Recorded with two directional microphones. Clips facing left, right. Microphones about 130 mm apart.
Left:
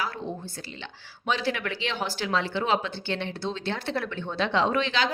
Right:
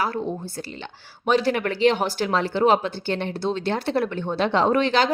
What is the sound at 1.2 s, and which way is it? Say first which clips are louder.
A woman's voice: right 7 dB; 50° right (ahead or behind).